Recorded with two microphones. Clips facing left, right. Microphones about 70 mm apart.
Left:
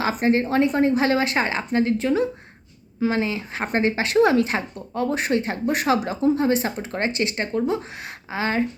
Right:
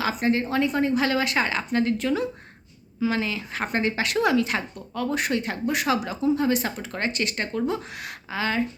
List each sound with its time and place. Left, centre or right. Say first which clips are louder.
0.1 s speech: left 5 dB; left